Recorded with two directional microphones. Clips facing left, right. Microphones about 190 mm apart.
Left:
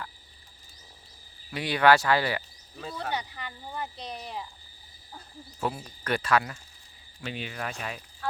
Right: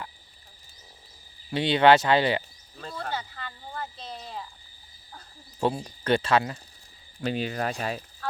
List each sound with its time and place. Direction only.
1.5 s speech: 25° right (ahead or behind)
2.7 s speech: 10° left (ahead or behind)
5.5 s speech: 25° right (ahead or behind)
7.2 s speech: 40° right (ahead or behind)